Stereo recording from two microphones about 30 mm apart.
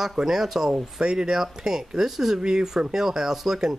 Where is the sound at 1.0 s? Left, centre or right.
Right.